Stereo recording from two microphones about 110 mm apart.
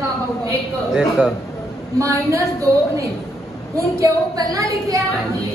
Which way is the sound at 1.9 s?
30° right (ahead or behind).